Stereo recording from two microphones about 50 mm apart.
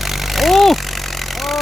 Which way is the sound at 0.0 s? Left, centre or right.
Centre.